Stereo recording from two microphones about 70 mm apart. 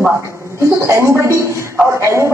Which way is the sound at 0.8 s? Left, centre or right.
Right.